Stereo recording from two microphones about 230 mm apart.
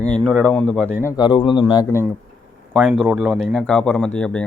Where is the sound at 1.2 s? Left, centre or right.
Left.